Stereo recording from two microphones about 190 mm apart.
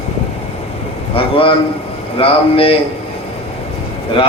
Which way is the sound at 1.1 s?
30° left (ahead or behind).